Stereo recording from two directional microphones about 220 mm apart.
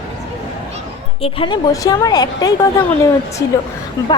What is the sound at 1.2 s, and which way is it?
A woman's voice, 20° left (ahead or behind).